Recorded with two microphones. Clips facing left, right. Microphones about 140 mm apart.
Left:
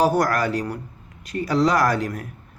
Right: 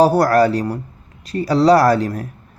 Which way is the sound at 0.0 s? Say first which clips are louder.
Right 7 dB; 35° right (ahead or behind).